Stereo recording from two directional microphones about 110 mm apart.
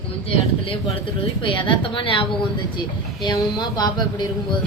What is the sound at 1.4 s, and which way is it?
Speech, 50° left (ahead or behind).